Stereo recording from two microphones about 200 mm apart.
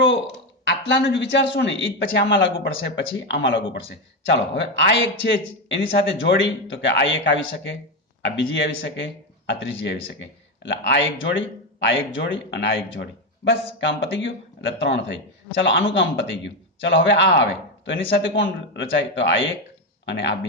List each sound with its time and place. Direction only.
0.6 s a man's voice: 60° left (ahead or behind)